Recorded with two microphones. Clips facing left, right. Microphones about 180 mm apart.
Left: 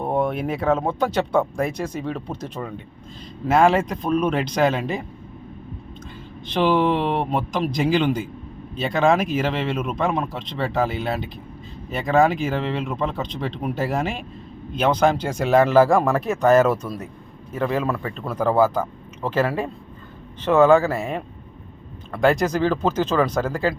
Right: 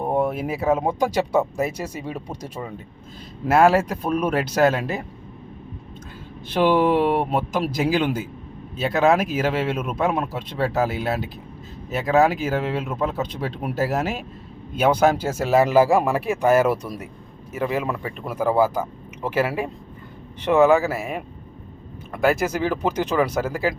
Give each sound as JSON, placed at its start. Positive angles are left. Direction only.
{"t": 0.0, "sound": "speech", "side_deg": -10}
{"t": 6.5, "sound": "speech", "side_deg": -5}